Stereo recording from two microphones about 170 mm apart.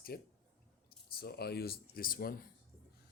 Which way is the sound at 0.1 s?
65° left (ahead or behind).